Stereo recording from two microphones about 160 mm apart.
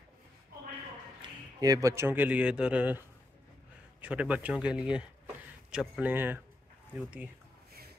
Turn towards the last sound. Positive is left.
turn(degrees=-5)  # may be behind; listen again after turning